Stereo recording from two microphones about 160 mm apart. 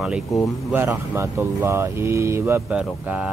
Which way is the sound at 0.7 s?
15° right (ahead or behind).